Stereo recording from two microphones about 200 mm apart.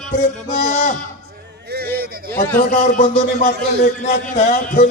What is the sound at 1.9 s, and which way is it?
Speech, 50° right (ahead or behind).